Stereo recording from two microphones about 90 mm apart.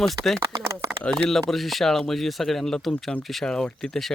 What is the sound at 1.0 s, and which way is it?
Speech, 5° left (ahead or behind).